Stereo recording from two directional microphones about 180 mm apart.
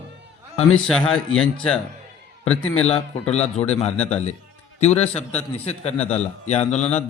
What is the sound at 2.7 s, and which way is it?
A man's voice, 35° left (ahead or behind).